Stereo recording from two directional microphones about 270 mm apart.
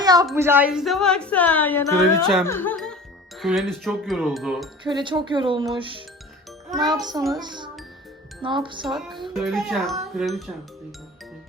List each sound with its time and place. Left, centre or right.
0.0 s a sound: centre
0.3 s a child's voice: centre
4.8 s speech: centre
7.0 s speech: centre
9.0 s a child's voice: centre